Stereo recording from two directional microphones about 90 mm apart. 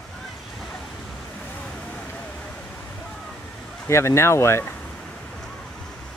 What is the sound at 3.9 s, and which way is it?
Speech, 30° left (ahead or behind).